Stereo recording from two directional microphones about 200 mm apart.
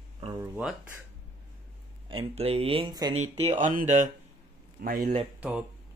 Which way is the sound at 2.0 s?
30° right (ahead or behind).